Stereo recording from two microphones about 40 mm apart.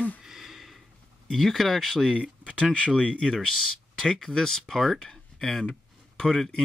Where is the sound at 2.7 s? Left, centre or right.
Left.